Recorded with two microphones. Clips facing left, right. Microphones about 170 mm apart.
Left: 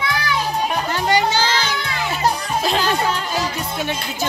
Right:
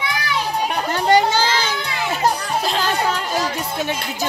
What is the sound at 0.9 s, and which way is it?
Children playing, 45° right (ahead or behind).